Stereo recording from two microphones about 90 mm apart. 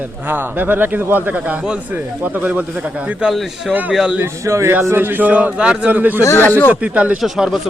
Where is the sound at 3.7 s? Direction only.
15° right (ahead or behind).